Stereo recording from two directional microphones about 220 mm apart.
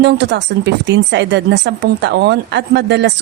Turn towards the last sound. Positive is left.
turn(degrees=-50)  # may be behind; listen again after turning